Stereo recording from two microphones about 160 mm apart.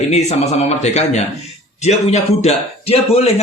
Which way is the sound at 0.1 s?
45° left (ahead or behind).